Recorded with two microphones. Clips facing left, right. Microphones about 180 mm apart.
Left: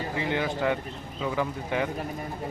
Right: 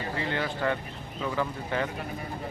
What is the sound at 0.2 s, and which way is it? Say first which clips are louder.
Speech: left 3 dB; 15° left (ahead or behind).